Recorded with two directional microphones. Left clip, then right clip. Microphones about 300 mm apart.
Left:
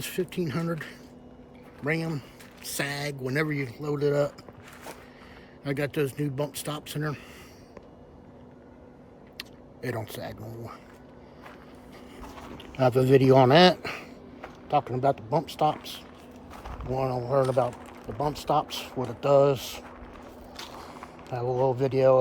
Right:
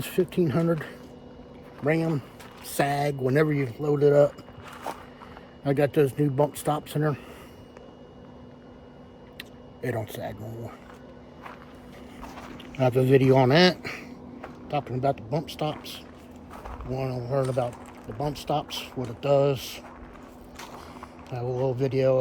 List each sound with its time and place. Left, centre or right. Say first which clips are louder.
0.0 s a man's voice: right 6 dB; centre
5.6 s a man's voice: right 6 dB; centre
9.4 s speech: right 2 dB; centre
12.3 s speech: even; centre
16.5 s a sound: right 2 dB; centre
16.9 s speech: left 3 dB; centre